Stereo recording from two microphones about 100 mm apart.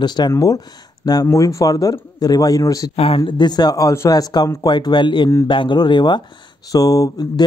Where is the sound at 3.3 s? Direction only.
50° left (ahead or behind).